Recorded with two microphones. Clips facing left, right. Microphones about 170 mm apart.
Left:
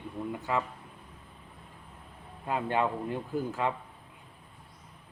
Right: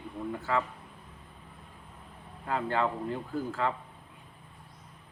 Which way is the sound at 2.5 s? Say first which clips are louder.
Left 1 dB; 20° left (ahead or behind).